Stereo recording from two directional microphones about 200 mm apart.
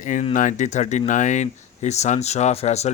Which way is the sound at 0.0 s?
40° left (ahead or behind).